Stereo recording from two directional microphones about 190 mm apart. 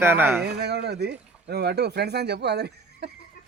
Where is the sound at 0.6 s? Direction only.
60° right (ahead or behind).